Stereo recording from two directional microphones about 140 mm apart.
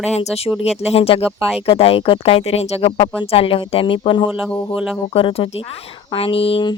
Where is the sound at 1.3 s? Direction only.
Centre (ahead or behind).